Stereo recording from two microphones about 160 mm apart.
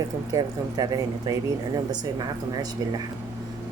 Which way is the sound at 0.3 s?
25° right (ahead or behind).